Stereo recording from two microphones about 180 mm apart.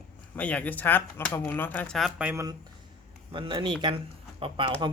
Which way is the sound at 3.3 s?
25° right (ahead or behind).